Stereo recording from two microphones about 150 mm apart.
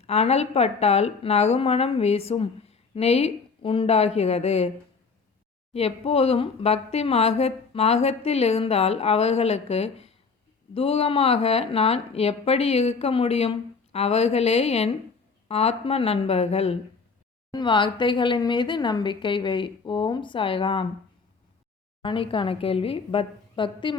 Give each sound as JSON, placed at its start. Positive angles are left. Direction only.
{"t": 0.0, "sound": "speech", "side_deg": 45}
{"t": 5.7, "sound": "speech", "side_deg": 45}
{"t": 17.5, "sound": "speech", "side_deg": 30}
{"t": 22.0, "sound": "speech", "side_deg": 35}